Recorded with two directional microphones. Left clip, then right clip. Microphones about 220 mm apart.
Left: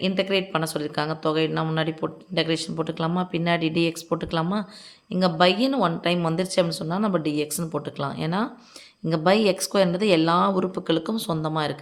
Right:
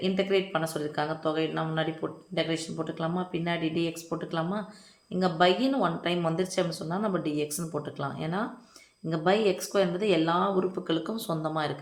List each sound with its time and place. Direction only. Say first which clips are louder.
0.0 s speech: left 3 dB; 40° left (ahead or behind)